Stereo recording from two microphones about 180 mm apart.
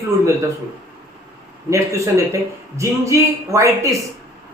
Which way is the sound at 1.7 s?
15° right (ahead or behind).